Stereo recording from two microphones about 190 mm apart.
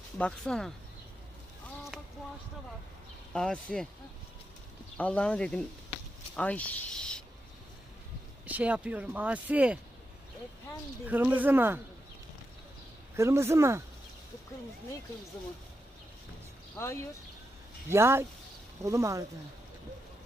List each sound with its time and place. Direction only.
0.2 s speech: 5° left (ahead or behind)
3.3 s speech: 5° left (ahead or behind)
4.9 s speech: 5° left (ahead or behind)
8.4 s speech: 10° right (ahead or behind)
11.0 s speech: 10° right (ahead or behind)
13.1 s speech: 15° right (ahead or behind)
16.7 s speech: 15° left (ahead or behind)
17.8 s speech: 15° right (ahead or behind)